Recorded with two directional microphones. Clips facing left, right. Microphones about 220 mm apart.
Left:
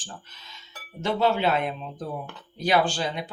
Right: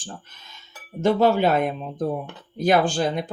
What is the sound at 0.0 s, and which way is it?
Speech, 50° right (ahead or behind).